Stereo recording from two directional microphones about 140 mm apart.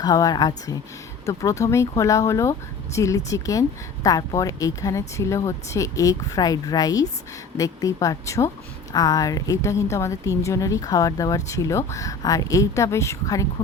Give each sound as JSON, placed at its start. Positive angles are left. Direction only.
{"t": 0.0, "sound": "speech", "side_deg": 25}